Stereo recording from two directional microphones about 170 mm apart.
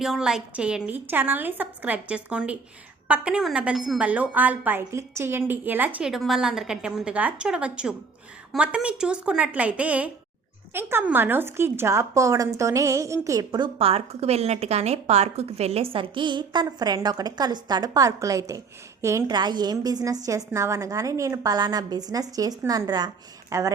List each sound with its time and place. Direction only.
0.0 s a woman's voice: 5° right (ahead or behind); by 23.7 s 20° right (ahead or behind)